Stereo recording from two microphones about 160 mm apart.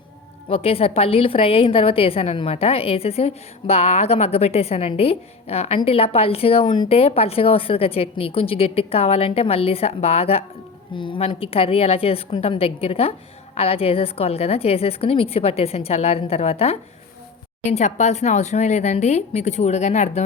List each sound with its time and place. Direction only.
0.4 s a woman's voice: 40° left (ahead or behind)